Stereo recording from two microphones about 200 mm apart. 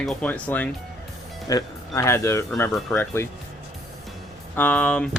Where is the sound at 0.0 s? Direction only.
5° left (ahead or behind).